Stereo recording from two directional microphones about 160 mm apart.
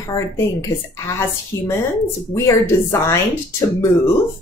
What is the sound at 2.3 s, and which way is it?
Speech, 20° left (ahead or behind).